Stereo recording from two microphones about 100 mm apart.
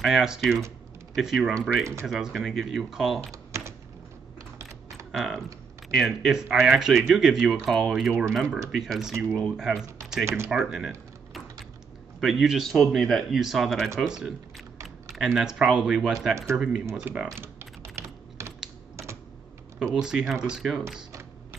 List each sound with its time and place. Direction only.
0.0 s speech: 5° right (ahead or behind)
5.1 s speech: centre (ahead or behind)
10.2 s speech: 25° right (ahead or behind)
10.5 s speech: 5° right (ahead or behind)
12.2 s speech: 5° right (ahead or behind)
17.4 s typing: 25° right (ahead or behind)
20.0 s speech: 5° right (ahead or behind)